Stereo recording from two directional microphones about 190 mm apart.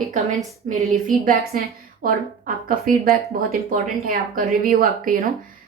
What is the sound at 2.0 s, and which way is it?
Speech, 45° right (ahead or behind).